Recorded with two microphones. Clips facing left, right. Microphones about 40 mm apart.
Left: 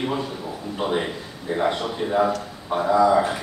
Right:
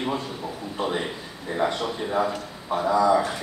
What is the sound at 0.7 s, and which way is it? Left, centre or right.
A man's voice, centre.